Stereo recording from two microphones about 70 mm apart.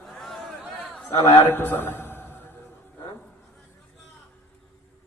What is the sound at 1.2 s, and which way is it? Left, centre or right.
A man's voice, left.